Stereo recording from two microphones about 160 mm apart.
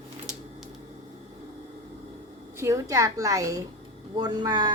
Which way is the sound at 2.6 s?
20° right (ahead or behind).